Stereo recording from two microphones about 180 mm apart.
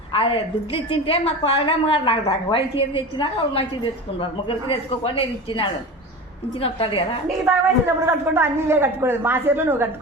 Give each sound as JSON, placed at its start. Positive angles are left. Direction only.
{"t": 0.1, "sound": "a woman's voice", "side_deg": 30}
{"t": 7.9, "sound": "speech", "side_deg": -15}